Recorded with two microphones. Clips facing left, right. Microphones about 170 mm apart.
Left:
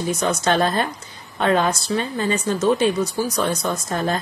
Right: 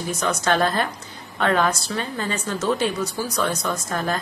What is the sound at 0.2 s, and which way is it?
A woman's voice, 25° left (ahead or behind).